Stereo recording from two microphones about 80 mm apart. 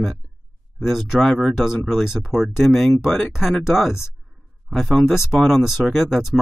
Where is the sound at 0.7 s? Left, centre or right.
Centre.